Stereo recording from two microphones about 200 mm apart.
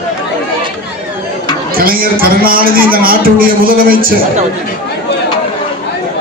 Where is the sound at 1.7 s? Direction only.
45° right (ahead or behind).